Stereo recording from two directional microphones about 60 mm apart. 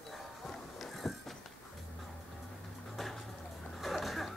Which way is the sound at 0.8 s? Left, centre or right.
Centre.